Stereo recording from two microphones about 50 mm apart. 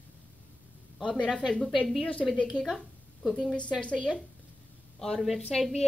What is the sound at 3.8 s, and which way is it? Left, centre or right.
Speech, left.